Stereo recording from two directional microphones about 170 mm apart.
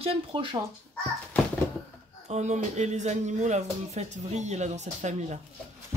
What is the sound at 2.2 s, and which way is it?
Speech, 40° right (ahead or behind).